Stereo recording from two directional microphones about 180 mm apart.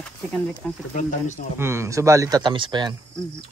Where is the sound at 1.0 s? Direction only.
45° left (ahead or behind).